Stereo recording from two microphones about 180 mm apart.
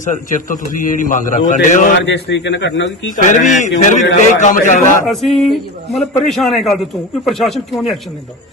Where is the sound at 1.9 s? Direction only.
85° left.